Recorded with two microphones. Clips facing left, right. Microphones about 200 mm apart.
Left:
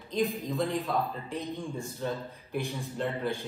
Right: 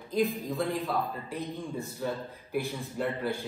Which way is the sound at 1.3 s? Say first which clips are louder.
Even; 15° left (ahead or behind).